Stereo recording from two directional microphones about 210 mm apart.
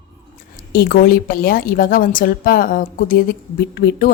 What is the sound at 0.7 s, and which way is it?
A woman's voice, 45° left (ahead or behind).